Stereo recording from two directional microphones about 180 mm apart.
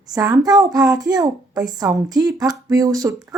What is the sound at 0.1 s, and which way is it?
A woman's voice, 20° right (ahead or behind).